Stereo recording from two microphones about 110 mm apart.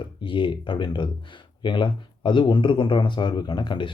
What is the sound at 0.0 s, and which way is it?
Speech, 50° left (ahead or behind).